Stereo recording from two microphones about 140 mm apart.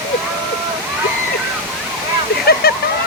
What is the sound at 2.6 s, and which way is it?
Speech, 90° left.